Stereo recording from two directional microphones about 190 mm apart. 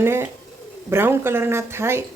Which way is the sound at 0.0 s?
10° right (ahead or behind).